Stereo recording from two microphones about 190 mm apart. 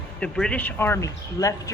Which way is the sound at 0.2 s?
5° left (ahead or behind).